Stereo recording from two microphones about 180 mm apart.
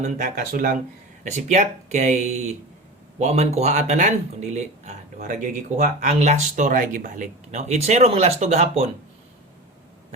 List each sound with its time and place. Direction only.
0.0 s speech: 45° right (ahead or behind)